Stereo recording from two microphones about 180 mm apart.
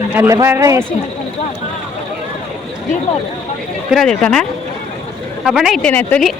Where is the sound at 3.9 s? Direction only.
5° left (ahead or behind).